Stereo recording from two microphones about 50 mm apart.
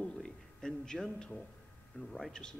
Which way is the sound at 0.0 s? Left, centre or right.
Centre.